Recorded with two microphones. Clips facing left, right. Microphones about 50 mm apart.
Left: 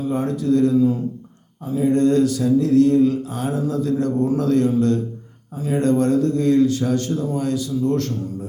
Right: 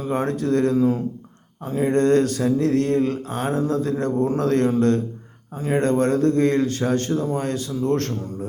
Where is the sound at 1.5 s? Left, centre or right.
Right.